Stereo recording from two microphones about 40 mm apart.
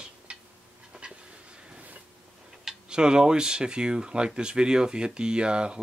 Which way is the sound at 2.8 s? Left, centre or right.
Right.